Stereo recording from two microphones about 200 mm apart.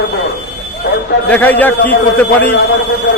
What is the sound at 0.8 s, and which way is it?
Speech, 45° left (ahead or behind).